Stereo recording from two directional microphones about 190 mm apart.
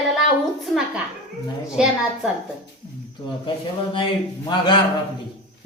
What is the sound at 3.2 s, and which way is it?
A man's voice, 25° left (ahead or behind).